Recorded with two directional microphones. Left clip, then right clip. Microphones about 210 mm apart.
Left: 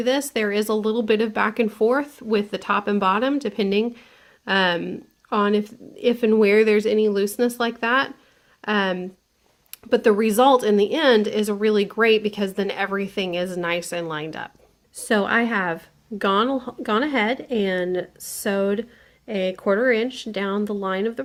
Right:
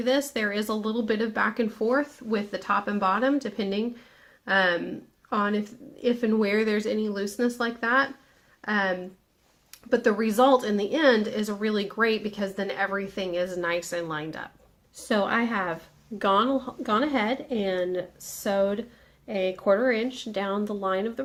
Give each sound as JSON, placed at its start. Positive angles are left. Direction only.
{"t": 0.0, "sound": "speech", "side_deg": 40}